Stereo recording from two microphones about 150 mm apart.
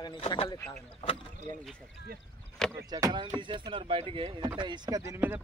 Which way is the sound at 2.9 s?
30° right (ahead or behind).